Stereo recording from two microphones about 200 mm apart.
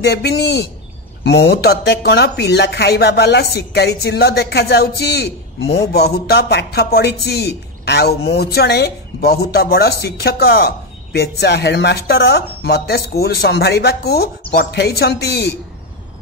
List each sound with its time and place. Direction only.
0.0 s speech: 55° left (ahead or behind)